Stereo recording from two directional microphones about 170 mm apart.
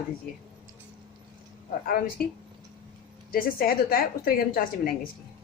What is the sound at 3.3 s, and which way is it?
A woman's voice, 60° left (ahead or behind).